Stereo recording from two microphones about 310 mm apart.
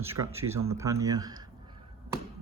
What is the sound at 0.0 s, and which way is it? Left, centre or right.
Speech, centre.